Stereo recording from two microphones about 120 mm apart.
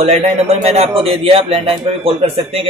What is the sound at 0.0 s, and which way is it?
A man's voice, 60° right (ahead or behind).